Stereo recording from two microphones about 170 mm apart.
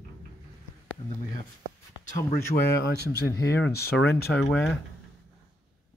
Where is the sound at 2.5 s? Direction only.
70° left (ahead or behind).